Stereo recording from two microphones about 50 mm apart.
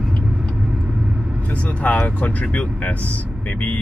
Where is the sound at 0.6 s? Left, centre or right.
Right.